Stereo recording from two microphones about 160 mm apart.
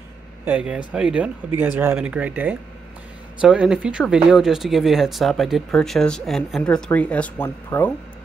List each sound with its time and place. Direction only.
0.5 s speech: 5° right (ahead or behind); by 7.9 s 15° left (ahead or behind)